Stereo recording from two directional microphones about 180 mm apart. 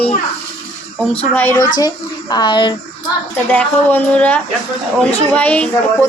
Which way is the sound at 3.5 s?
10° left (ahead or behind).